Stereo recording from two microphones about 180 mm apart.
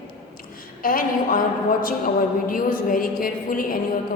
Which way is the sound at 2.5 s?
50° left (ahead or behind).